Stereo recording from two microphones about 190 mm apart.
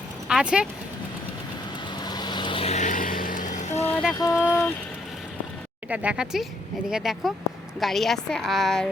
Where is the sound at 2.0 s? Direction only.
20° left (ahead or behind).